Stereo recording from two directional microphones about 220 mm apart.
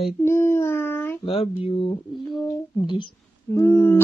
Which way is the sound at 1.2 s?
25° left (ahead or behind).